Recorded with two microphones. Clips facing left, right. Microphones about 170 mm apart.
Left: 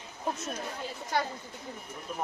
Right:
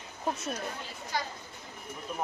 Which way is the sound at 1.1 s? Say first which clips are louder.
Left 4 dB; 55° left (ahead or behind).